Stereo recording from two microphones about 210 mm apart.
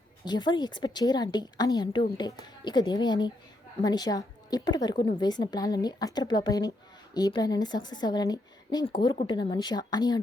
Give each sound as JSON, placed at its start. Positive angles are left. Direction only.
{"t": 0.3, "sound": "a woman's voice", "side_deg": 20}